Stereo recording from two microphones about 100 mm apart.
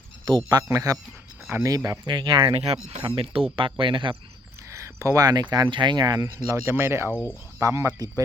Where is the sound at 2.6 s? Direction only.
80° right.